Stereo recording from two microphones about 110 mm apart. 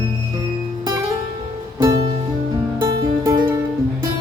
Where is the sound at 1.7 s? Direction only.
40° right (ahead or behind).